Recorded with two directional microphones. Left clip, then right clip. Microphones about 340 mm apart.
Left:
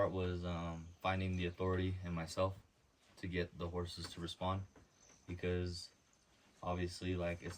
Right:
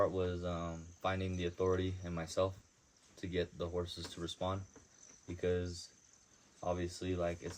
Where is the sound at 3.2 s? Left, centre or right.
Centre.